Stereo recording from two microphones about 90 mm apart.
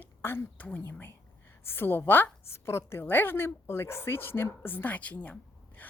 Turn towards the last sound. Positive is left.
turn(degrees=20)  # may be behind; listen again after turning